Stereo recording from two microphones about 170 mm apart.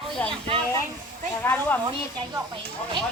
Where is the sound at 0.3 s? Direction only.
30° right (ahead or behind).